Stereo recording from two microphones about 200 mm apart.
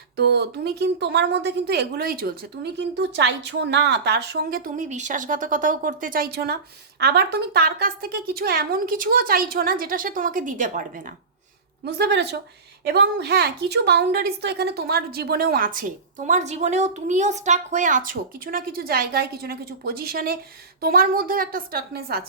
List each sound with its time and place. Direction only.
0.2 s a woman's voice: 55° right (ahead or behind)
11.9 s a woman's voice: 55° right (ahead or behind)